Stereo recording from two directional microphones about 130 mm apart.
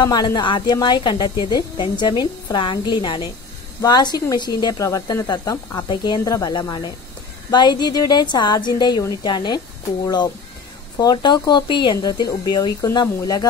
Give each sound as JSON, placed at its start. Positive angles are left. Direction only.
{"t": 0.0, "sound": "speech", "side_deg": 30}